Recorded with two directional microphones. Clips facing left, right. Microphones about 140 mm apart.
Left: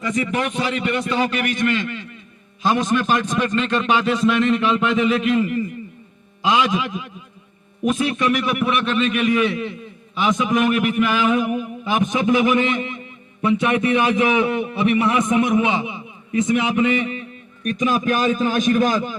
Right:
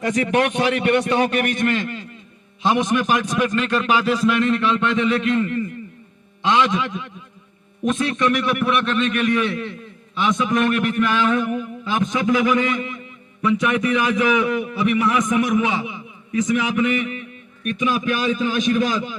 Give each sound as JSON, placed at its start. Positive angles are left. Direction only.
{"t": 0.0, "sound": "a man's voice", "side_deg": -90}
{"t": 2.6, "sound": "a man's voice", "side_deg": -20}